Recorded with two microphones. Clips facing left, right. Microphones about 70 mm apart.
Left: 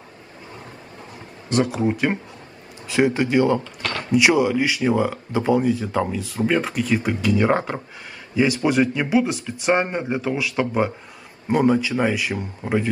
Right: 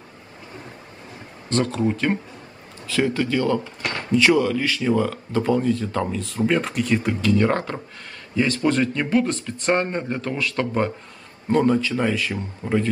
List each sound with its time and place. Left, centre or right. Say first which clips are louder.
1.5 s a man's voice: left 1 dB; centre